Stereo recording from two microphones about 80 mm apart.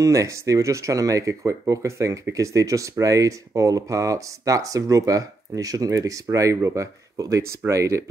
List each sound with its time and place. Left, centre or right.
0.0 s speech: right